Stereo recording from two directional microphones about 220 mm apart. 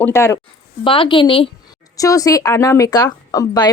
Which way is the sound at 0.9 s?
25° left (ahead or behind).